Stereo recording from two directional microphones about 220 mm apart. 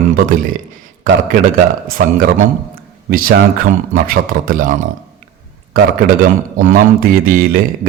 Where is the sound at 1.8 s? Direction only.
40° right (ahead or behind).